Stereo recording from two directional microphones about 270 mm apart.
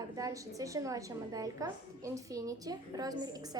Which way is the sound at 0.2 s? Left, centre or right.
Centre.